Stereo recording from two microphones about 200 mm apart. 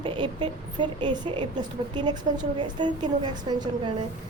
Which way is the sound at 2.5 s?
20° right (ahead or behind).